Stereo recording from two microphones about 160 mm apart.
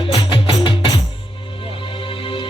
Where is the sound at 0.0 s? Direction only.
30° left (ahead or behind).